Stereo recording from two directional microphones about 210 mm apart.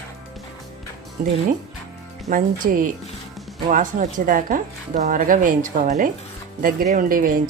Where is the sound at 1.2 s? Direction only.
40° right (ahead or behind).